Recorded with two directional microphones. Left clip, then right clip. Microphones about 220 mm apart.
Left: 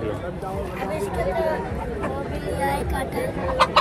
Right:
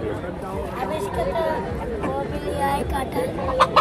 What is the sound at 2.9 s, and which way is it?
Speech, 25° right (ahead or behind).